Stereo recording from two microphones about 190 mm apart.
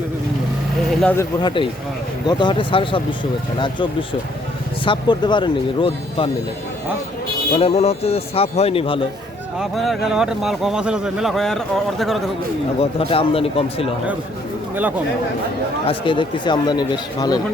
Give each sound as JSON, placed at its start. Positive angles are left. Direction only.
{"t": 1.0, "sound": "speech", "side_deg": 15}
{"t": 4.9, "sound": "speech", "side_deg": 25}
{"t": 7.5, "sound": "speech", "side_deg": 30}
{"t": 9.6, "sound": "speech", "side_deg": 0}
{"t": 12.8, "sound": "speech", "side_deg": 30}
{"t": 14.8, "sound": "speech", "side_deg": -10}
{"t": 15.9, "sound": "speech", "side_deg": 25}